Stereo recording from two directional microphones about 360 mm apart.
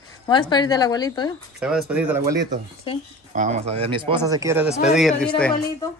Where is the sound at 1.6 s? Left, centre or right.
Centre.